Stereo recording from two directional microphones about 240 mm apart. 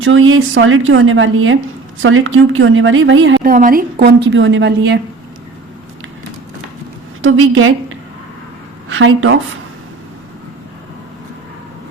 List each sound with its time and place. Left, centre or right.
0.0 s a woman's voice: right
3.4 s a woman's voice: right
7.2 s a woman's voice: right